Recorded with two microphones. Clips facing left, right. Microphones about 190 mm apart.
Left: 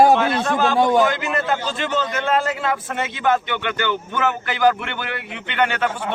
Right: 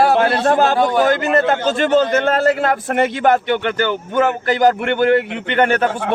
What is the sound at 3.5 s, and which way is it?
A man's voice, 40° right (ahead or behind).